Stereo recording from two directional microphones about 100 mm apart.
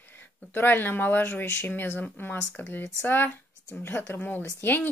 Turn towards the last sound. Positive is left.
turn(degrees=20)  # may be behind; listen again after turning